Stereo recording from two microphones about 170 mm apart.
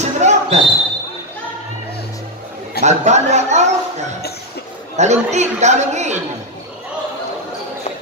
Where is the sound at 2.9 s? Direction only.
40° right (ahead or behind).